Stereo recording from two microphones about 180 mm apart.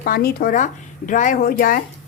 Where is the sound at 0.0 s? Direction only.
55° left (ahead or behind).